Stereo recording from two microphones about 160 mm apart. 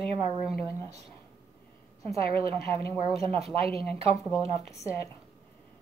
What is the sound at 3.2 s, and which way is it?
Speech, 40° right (ahead or behind).